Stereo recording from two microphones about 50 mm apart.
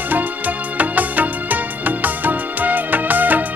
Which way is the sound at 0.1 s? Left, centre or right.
Right.